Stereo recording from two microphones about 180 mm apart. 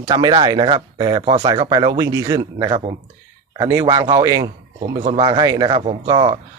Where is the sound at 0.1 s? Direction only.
25° right (ahead or behind).